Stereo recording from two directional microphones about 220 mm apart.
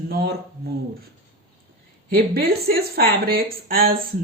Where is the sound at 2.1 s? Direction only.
45° right (ahead or behind).